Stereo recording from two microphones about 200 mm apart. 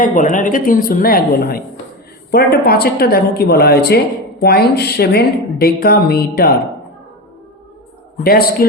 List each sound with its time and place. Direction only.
0.0 s a woman's voice: 40° left (ahead or behind)
8.2 s a woman's voice: 50° left (ahead or behind)